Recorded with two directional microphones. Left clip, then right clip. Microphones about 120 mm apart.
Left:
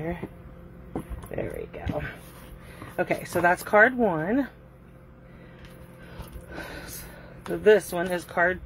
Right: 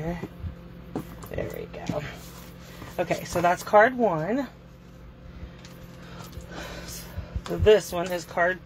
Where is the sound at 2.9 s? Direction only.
45° left (ahead or behind).